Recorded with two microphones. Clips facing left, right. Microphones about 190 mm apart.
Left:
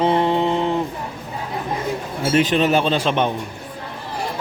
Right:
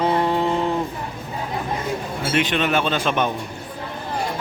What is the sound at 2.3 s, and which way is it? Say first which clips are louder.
A man's voice: left 5 dB; 35° left (ahead or behind).